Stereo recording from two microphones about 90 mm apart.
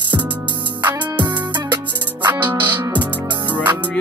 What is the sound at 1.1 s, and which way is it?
Music, 55° right (ahead or behind).